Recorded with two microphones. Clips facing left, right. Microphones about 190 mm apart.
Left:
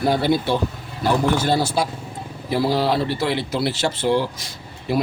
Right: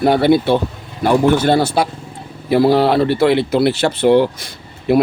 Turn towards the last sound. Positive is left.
turn(degrees=-60)  # may be behind; listen again after turning